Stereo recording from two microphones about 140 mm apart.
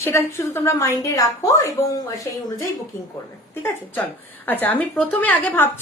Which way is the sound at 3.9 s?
15° left (ahead or behind).